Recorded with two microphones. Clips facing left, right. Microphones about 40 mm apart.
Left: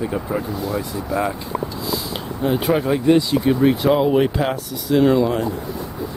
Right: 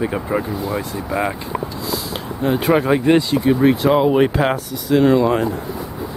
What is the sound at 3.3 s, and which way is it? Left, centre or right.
Speech, centre.